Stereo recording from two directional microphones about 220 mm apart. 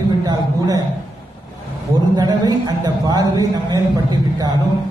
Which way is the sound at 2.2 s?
20° right (ahead or behind).